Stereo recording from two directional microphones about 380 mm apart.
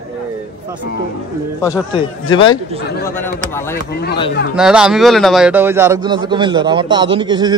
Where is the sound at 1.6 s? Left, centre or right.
Centre.